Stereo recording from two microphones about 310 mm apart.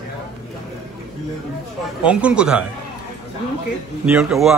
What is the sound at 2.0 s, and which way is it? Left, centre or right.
Speech, centre.